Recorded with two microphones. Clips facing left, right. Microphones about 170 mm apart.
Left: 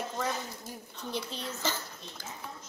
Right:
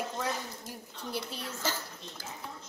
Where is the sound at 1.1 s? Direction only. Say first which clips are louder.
Left 1 dB; 10° right (ahead or behind).